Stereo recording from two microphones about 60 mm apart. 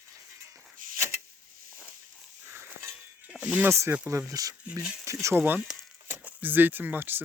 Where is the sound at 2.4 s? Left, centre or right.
Right.